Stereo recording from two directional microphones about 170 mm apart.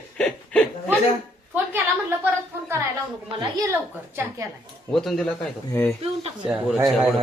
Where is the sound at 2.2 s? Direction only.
15° right (ahead or behind).